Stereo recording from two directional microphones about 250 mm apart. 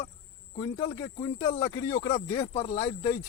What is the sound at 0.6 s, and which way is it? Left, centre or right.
Speech, centre.